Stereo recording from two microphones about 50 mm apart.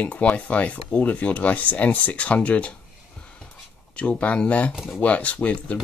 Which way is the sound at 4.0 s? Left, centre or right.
Left.